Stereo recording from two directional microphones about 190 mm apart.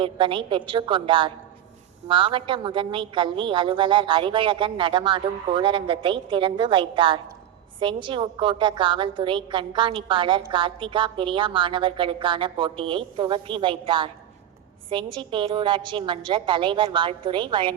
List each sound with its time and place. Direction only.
0.0 s a woman's voice: 25° right (ahead or behind)